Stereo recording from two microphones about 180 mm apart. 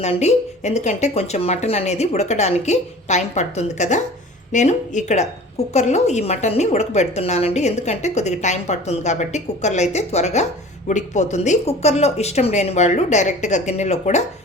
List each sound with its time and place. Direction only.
0.0 s a woman's voice: 40° left (ahead or behind)